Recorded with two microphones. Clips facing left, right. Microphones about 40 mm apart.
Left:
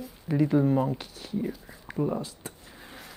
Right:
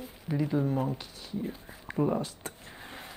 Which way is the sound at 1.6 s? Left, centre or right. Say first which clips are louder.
Even; centre.